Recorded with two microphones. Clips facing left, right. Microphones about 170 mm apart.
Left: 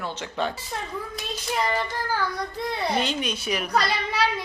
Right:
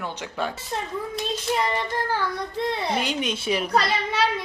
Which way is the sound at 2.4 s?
Centre (ahead or behind).